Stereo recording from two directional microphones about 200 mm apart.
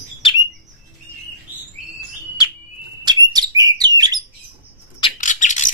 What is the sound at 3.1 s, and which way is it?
Bird, 20° right (ahead or behind).